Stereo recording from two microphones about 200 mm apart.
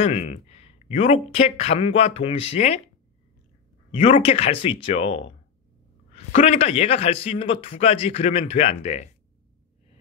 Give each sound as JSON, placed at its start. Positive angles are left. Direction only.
{"t": 0.0, "sound": "a man's voice", "side_deg": 35}
{"t": 3.9, "sound": "a man's voice", "side_deg": 30}